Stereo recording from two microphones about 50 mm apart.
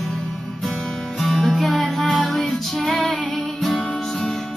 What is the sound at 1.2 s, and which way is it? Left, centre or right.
Music, centre.